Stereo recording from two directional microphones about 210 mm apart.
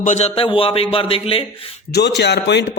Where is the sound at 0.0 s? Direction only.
35° left (ahead or behind).